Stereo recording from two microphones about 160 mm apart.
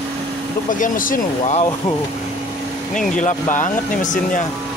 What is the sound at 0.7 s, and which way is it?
Speech, 55° left (ahead or behind).